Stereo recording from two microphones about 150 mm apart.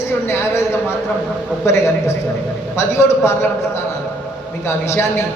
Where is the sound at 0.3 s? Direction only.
15° left (ahead or behind).